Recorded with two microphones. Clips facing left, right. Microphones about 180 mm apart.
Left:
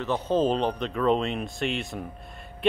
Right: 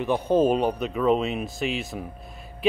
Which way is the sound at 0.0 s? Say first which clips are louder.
Right 3 dB; 10° right (ahead or behind).